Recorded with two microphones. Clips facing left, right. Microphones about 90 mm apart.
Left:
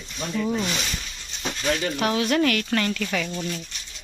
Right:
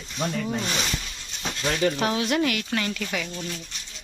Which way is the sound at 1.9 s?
25° right (ahead or behind).